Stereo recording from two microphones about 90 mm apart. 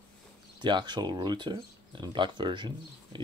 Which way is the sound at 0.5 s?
55° right (ahead or behind).